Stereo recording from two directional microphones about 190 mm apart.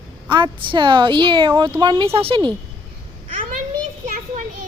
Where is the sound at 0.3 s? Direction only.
25° right (ahead or behind).